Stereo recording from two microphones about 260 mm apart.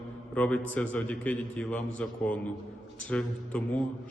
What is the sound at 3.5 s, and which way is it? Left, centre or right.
Speech, centre.